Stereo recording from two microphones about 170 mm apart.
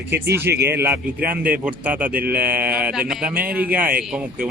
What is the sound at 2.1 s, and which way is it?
Speech, 60° right (ahead or behind).